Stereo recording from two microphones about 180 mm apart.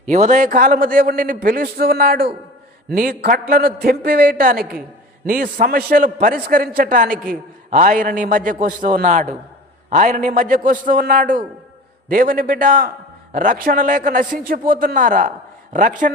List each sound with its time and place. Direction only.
0.0 s a man's voice: 40° right (ahead or behind)